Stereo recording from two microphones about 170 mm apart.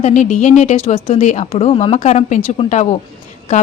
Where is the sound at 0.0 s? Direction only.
45° left (ahead or behind).